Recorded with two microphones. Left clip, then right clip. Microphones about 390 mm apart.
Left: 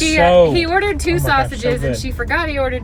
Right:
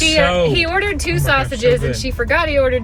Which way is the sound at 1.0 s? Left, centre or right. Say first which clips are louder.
Left 1 dB; centre.